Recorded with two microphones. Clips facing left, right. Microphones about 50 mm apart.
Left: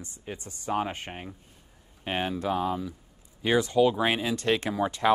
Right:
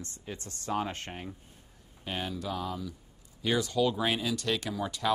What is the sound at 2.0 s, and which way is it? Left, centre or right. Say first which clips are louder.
Speech: left 6 dB; left.